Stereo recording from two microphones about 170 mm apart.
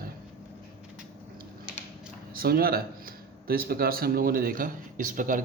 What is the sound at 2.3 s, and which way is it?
A man's voice, 60° right (ahead or behind).